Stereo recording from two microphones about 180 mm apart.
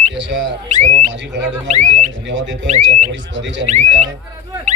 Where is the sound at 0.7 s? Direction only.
40° right (ahead or behind).